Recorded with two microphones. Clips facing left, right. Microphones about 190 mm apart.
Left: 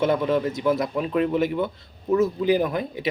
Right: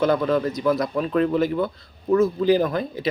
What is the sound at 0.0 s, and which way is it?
Speech, 20° left (ahead or behind).